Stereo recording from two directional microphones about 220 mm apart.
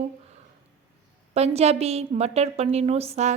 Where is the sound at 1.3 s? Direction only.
30° right (ahead or behind).